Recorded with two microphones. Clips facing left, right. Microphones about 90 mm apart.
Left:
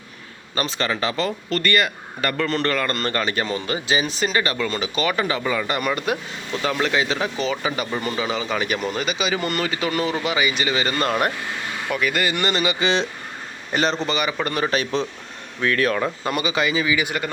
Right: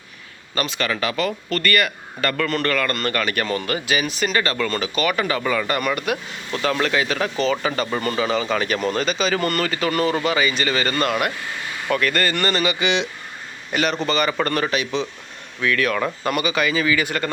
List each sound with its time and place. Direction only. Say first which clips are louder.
0.5 s speech: even; 30° left (ahead or behind)
11.9 s speech: right 2 dB; 10° left (ahead or behind)
12.8 s a man's voice: even; 35° left (ahead or behind)
14.1 s speech: right 3 dB; 15° left (ahead or behind)
14.7 s a man's voice: left 1 dB; 40° left (ahead or behind); by 17.2 s 15° left (ahead or behind)